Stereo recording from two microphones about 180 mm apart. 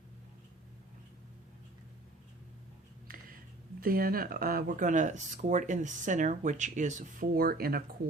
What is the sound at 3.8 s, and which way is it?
Speech, 55° right (ahead or behind).